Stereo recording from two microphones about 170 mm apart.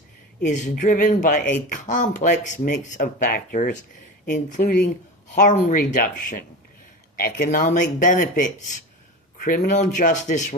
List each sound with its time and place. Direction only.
0.4 s speech: 45° left (ahead or behind)